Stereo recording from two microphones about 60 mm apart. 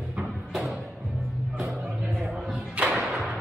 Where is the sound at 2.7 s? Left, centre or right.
Centre.